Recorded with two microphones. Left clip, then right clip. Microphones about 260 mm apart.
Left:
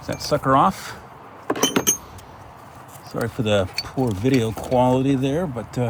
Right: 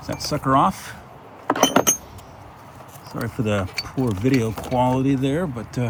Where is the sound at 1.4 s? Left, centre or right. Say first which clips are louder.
Right 3 dB; right.